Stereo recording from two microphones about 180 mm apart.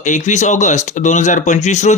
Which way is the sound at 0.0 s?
40° left (ahead or behind).